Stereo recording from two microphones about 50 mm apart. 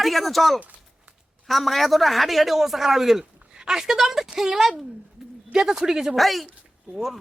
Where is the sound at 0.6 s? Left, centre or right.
Right.